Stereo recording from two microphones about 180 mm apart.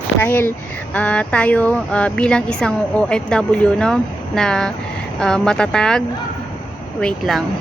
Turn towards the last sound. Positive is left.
turn(degrees=0)  # may be behind; listen again after turning